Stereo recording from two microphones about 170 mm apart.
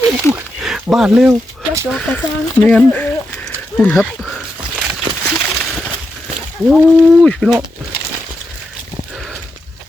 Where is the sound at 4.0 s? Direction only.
Centre (ahead or behind).